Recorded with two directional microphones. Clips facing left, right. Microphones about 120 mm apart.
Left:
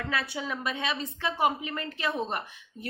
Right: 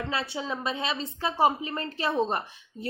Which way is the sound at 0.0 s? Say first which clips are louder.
Right 1 dB; 25° right (ahead or behind).